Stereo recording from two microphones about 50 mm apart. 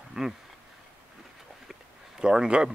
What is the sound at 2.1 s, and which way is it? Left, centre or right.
Speech, centre.